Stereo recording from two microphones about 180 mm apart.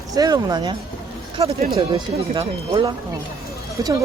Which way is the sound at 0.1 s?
20° right (ahead or behind).